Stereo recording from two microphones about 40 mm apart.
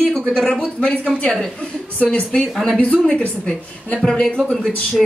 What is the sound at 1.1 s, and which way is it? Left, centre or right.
A man's voice, left.